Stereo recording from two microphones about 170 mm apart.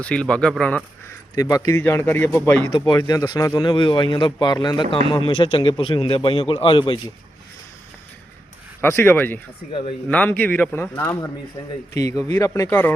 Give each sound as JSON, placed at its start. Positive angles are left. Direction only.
{"t": 0.0, "sound": "speech", "side_deg": 5}
{"t": 1.0, "sound": "speech", "side_deg": 20}
{"t": 2.7, "sound": "a man's voice", "side_deg": 25}
{"t": 8.8, "sound": "a man's voice", "side_deg": 15}